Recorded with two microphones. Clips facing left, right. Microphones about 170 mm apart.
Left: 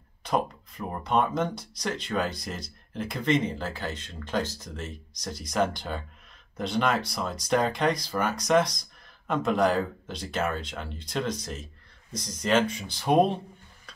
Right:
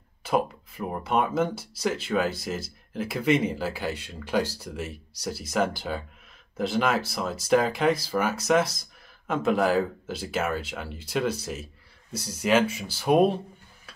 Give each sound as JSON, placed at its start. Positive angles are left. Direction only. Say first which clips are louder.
{"t": 0.2, "sound": "speech", "louder": "right 2 dB", "side_deg": -5}